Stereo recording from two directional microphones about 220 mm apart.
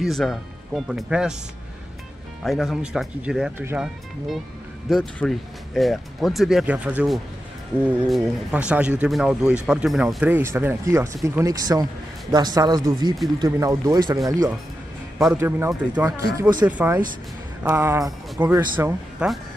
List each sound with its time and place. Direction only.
0.0 s speech: centre (ahead or behind)
2.4 s a man's voice: centre (ahead or behind); by 14.3 s 15° right (ahead or behind)
15.3 s a man's voice: 10° right (ahead or behind)